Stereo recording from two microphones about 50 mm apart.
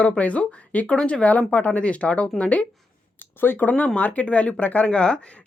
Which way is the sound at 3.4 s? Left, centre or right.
Left.